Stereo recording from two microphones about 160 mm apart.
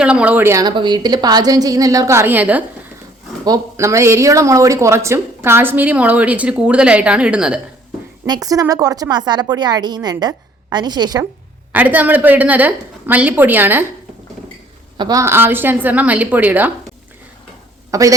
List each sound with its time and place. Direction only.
0.0 s a woman's voice: 5° right (ahead or behind)
3.4 s speech: 20° right (ahead or behind); by 7.6 s 5° right (ahead or behind)
8.3 s a woman's voice: 20° right (ahead or behind)
11.7 s speech: 10° right (ahead or behind)
14.9 s speech: 25° right (ahead or behind)
17.9 s a woman's voice: 20° right (ahead or behind)